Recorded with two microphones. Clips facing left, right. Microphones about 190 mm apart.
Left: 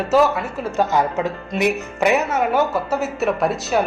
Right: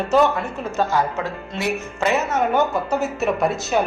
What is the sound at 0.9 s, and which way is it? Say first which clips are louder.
Speech: left 2 dB; 20° left (ahead or behind).